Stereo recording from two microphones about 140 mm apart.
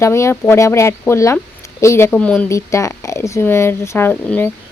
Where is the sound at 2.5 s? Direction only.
20° left (ahead or behind).